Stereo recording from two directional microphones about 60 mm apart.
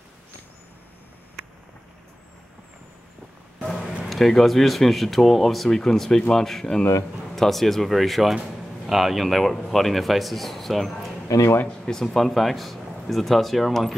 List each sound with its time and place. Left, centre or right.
4.1 s speech: centre
11.2 s speech: left
11.6 s speech: centre